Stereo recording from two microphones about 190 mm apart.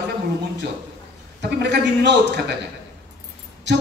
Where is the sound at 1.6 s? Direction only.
65° right (ahead or behind).